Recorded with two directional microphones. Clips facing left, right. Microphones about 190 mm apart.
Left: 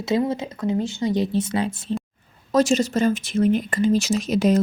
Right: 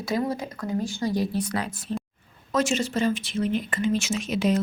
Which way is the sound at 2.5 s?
40° left (ahead or behind).